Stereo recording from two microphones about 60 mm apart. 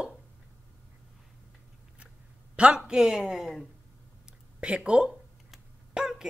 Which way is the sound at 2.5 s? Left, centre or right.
Centre.